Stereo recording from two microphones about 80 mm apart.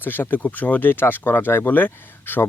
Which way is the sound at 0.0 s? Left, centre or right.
Left.